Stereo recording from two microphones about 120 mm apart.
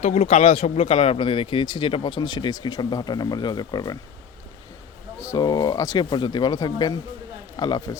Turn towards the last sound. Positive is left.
turn(degrees=35)  # may be behind; listen again after turning